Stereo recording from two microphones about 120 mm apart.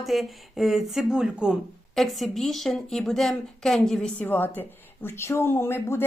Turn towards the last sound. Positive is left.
turn(degrees=20)  # may be behind; listen again after turning